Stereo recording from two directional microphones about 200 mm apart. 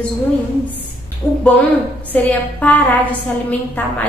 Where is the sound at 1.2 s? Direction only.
20° left (ahead or behind).